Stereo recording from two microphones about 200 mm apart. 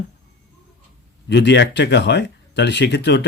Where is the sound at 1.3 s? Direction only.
60° left (ahead or behind).